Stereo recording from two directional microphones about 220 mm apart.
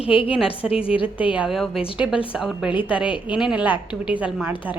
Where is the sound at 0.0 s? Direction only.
25° left (ahead or behind).